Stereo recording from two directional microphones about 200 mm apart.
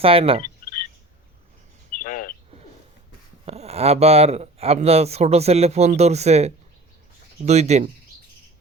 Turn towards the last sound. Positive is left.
turn(degrees=-35)  # may be behind; listen again after turning